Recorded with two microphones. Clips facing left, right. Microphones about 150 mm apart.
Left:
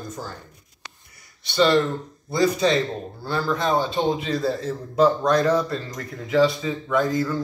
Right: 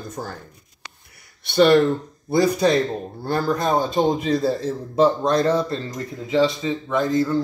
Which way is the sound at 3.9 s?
45° right (ahead or behind).